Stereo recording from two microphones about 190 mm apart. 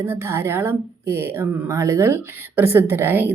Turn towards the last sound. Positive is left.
turn(degrees=-10)  # may be behind; listen again after turning